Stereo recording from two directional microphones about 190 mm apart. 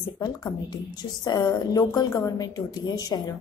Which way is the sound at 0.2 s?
20° left (ahead or behind).